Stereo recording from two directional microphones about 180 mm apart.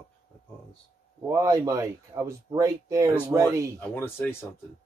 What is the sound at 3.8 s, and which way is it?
Speech, 15° left (ahead or behind).